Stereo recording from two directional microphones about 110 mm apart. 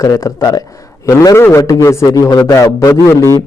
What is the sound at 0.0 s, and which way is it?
A man's voice, 30° left (ahead or behind).